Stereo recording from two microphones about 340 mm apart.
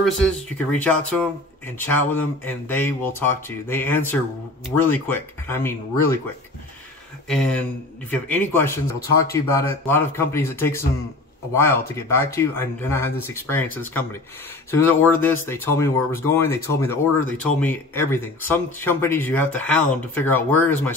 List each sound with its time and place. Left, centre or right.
0.0 s speech: centre
7.2 s speech: centre